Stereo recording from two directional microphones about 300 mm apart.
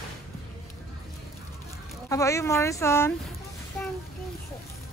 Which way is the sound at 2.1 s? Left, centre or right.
Centre.